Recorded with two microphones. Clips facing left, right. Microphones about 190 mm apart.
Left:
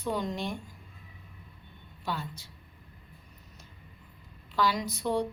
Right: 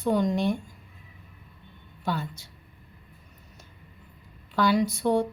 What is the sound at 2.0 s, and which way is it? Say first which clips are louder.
Speech: right 5 dB; 55° right (ahead or behind).